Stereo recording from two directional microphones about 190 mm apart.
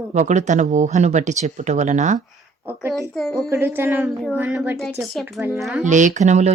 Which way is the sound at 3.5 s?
10° right (ahead or behind).